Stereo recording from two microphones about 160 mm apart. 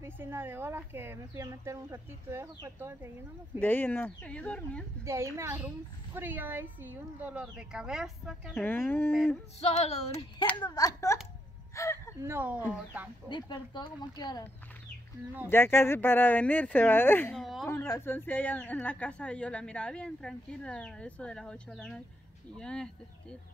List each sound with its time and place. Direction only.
0.0 s speech: 15° right (ahead or behind)
3.5 s a woman's voice: 10° left (ahead or behind)
5.0 s speech: 15° right (ahead or behind)
8.5 s a woman's voice: 15° left (ahead or behind)
9.6 s female singing: 40° left (ahead or behind)
10.5 s speech: 25° left (ahead or behind)
11.7 s a sound: 20° left (ahead or behind)
12.2 s speech: 15° right (ahead or behind)
13.3 s speech: 25° left (ahead or behind)
15.5 s a woman's voice: 15° left (ahead or behind)
17.4 s speech: centre (ahead or behind)
17.6 s a woman's voice: 15° left (ahead or behind)